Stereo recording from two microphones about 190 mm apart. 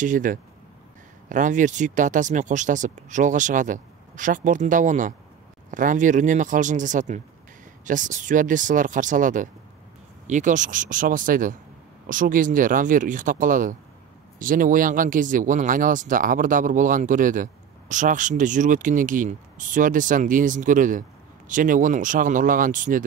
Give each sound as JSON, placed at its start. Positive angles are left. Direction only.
{"t": 0.0, "sound": "speech", "side_deg": -45}